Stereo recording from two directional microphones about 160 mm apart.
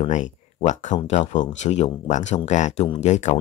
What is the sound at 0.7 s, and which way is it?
Speech, 50° left (ahead or behind).